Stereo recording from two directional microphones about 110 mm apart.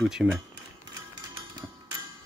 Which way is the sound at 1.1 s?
40° right (ahead or behind).